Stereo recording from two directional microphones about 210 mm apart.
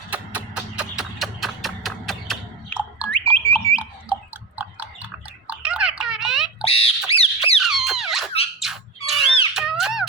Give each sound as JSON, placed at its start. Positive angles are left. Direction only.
{"t": 0.1, "sound": "music", "side_deg": -5}
{"t": 3.3, "sound": "a sound", "side_deg": 5}
{"t": 3.8, "sound": "a sound", "side_deg": -5}
{"t": 6.7, "sound": "rodents", "side_deg": 25}
{"t": 7.6, "sound": "squeak", "side_deg": 0}
{"t": 8.6, "sound": "squawk", "side_deg": 0}
{"t": 9.6, "sound": "squeak", "side_deg": 0}